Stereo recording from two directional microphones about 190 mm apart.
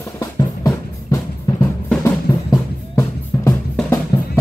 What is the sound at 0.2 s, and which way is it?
Music, 20° left (ahead or behind).